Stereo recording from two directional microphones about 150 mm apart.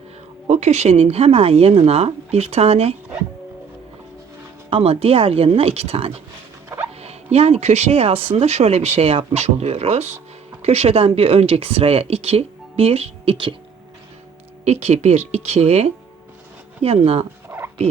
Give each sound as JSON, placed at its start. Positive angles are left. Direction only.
{"t": 0.4, "sound": "speech", "side_deg": -50}
{"t": 4.7, "sound": "speech", "side_deg": -40}
{"t": 14.6, "sound": "speech", "side_deg": -45}
{"t": 17.5, "sound": "rodents", "side_deg": -5}